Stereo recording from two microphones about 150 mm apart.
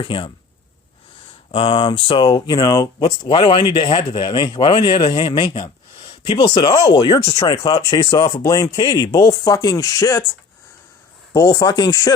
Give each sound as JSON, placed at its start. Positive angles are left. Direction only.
{"t": 0.0, "sound": "speech", "side_deg": 35}
{"t": 1.5, "sound": "speech", "side_deg": 35}
{"t": 11.3, "sound": "speech", "side_deg": 25}